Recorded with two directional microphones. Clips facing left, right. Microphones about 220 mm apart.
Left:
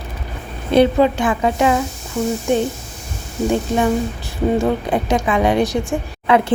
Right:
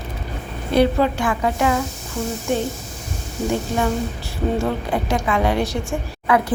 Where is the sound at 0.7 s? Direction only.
20° left (ahead or behind).